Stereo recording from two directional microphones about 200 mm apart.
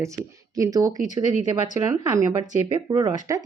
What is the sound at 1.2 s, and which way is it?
Speech, 35° left (ahead or behind).